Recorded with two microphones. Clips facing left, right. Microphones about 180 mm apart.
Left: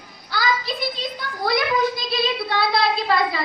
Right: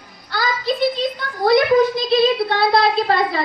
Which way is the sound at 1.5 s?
50° right (ahead or behind).